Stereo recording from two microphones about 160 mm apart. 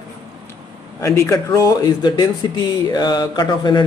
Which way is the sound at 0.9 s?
15° left (ahead or behind).